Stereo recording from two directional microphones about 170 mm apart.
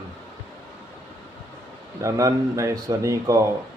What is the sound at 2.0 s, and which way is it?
Speech, 20° right (ahead or behind).